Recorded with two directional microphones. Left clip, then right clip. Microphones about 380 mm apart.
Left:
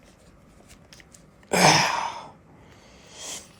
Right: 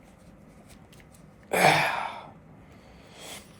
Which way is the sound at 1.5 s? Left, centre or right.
Left.